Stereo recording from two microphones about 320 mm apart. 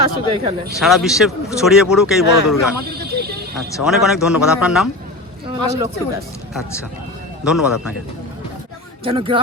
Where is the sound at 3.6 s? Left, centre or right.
Centre.